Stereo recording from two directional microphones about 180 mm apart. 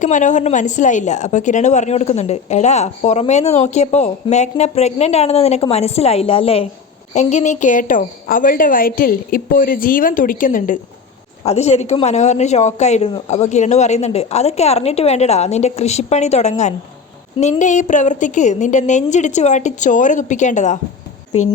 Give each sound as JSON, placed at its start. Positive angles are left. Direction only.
{"t": 0.0, "sound": "a woman's voice", "side_deg": 45}
{"t": 11.4, "sound": "a woman's voice", "side_deg": 35}